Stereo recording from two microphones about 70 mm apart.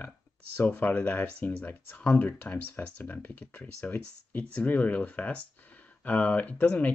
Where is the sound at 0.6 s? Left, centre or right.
Left.